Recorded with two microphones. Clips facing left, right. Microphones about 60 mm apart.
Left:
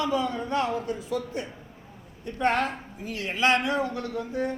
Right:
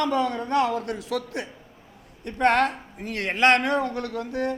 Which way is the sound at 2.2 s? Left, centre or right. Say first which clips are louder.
Right 4 dB; right.